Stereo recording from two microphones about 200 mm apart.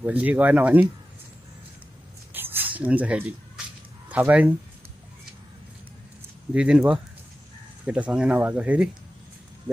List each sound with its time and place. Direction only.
0.0 s speech: 5° right (ahead or behind)
2.3 s a sound: 10° right (ahead or behind)
4.1 s speech: 5° right (ahead or behind)
6.5 s speech: 5° right (ahead or behind)